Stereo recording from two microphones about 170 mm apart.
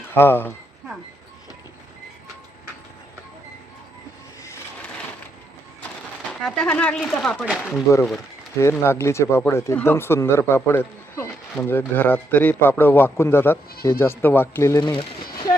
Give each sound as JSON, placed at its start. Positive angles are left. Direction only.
{"t": 0.0, "sound": "speech", "side_deg": 15}
{"t": 4.4, "sound": "a sound", "side_deg": 15}
{"t": 6.4, "sound": "speech", "side_deg": 5}
{"t": 8.5, "sound": "speech", "side_deg": 15}